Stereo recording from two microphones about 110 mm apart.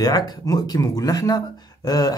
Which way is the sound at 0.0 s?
35° left (ahead or behind).